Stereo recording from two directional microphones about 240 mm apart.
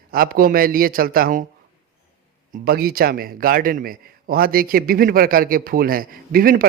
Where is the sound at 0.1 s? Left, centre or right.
Right.